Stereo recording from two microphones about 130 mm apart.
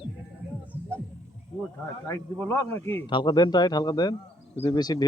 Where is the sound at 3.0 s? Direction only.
35° left (ahead or behind).